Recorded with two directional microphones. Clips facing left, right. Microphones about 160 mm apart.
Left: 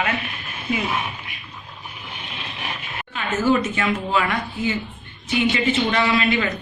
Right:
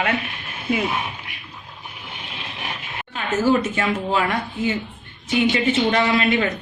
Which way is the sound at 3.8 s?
40° right (ahead or behind).